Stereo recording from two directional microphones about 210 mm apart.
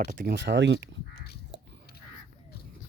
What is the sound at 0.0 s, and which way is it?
Speech, 45° right (ahead or behind).